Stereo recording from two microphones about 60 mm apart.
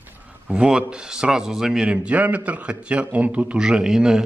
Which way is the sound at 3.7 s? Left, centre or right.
Centre.